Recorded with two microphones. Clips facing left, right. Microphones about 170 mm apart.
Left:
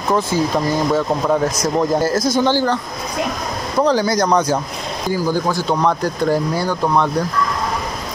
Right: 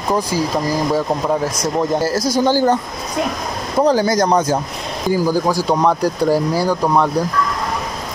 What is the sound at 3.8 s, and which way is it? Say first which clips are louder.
Speech: right 2 dB; 45° right (ahead or behind).